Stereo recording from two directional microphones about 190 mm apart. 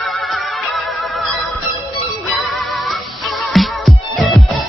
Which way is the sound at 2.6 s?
Centre (ahead or behind).